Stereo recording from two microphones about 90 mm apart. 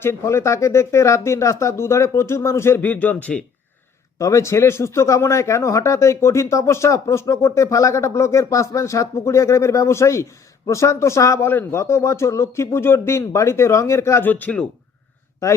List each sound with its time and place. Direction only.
0.0 s speech: 30° left (ahead or behind)
2.8 s speech: 15° left (ahead or behind)
4.2 s speech: 35° left (ahead or behind)
14.3 s speech: 20° left (ahead or behind)